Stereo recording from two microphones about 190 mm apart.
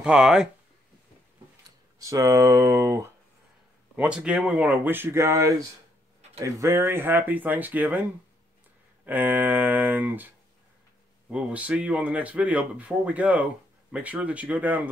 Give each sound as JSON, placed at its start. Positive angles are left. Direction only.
{"t": 0.0, "sound": "speech", "side_deg": -5}
{"t": 2.0, "sound": "speech", "side_deg": -15}
{"t": 3.9, "sound": "speech", "side_deg": -5}